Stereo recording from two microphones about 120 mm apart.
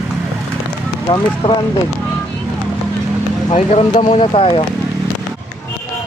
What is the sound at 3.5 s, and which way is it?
Speech, 60° left (ahead or behind).